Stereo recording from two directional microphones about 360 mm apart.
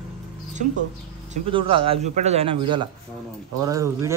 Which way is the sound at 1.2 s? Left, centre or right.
Centre.